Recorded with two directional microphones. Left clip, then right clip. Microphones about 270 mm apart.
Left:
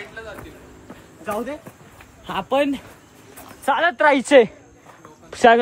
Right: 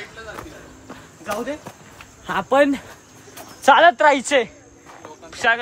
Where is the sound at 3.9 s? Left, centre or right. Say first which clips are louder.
Left 2 dB; centre.